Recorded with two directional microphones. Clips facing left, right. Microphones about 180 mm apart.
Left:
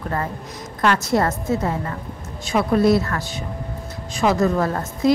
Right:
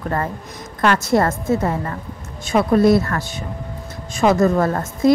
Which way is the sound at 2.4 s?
50° right (ahead or behind).